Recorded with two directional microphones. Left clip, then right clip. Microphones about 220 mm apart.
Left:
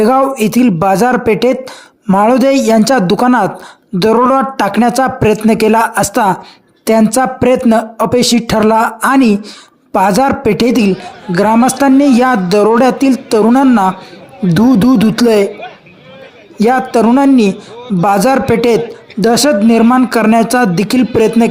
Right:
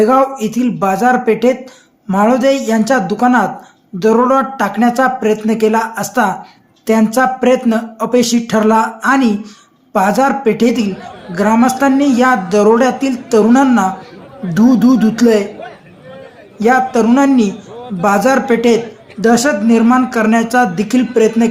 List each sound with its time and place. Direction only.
0.0 s a woman's voice: 40° left (ahead or behind)
16.6 s a woman's voice: 35° left (ahead or behind)